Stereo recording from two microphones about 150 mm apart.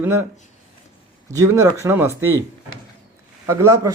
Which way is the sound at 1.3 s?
20° right (ahead or behind).